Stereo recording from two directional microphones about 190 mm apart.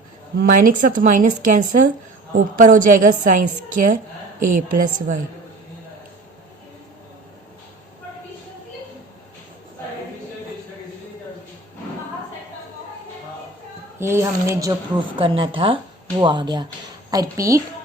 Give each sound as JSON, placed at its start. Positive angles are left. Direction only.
{"t": 0.3, "sound": "speech", "side_deg": -45}
{"t": 4.8, "sound": "speech", "side_deg": -45}
{"t": 14.0, "sound": "a woman's voice", "side_deg": -15}